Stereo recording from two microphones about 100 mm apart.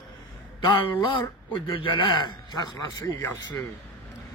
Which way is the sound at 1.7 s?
55° left (ahead or behind).